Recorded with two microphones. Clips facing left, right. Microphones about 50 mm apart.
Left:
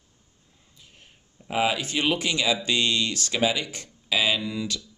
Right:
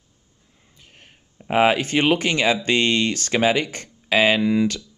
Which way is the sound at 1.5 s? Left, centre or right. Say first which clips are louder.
Right 7 dB; right.